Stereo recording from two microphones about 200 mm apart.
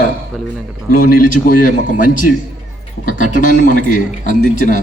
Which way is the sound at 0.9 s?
45° left (ahead or behind).